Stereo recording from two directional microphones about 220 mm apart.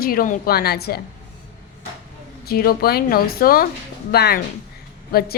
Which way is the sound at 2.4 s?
45° left (ahead or behind).